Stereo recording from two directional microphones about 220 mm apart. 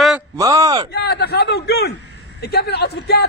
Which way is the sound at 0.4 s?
15° right (ahead or behind).